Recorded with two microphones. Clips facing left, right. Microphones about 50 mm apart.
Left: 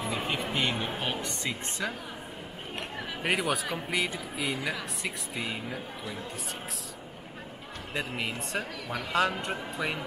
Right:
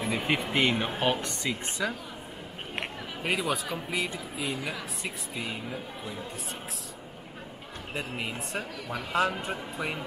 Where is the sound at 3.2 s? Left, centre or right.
Centre.